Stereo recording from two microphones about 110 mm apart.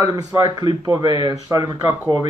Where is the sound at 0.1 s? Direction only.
30° right (ahead or behind).